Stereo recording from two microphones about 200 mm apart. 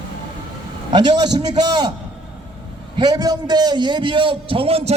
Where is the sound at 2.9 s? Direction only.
20° right (ahead or behind).